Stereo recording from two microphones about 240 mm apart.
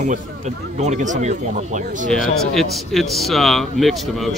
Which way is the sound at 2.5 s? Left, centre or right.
Centre.